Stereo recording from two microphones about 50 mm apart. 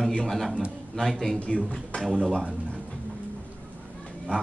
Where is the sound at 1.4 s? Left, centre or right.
Left.